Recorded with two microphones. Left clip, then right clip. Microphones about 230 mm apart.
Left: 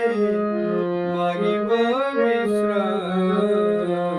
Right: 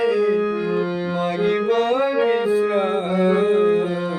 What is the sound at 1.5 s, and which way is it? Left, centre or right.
Music, centre.